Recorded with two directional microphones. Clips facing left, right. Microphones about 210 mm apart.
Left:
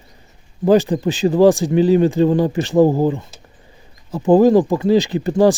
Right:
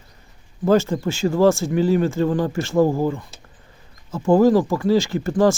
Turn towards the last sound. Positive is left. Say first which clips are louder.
# left 3 dB
turn(degrees=20)  # may be behind; listen again after turning